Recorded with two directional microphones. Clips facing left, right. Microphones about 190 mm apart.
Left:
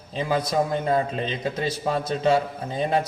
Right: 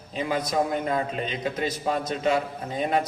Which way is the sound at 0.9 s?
30° left (ahead or behind).